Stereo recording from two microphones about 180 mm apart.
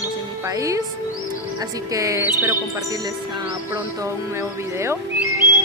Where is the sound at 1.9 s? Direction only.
20° right (ahead or behind).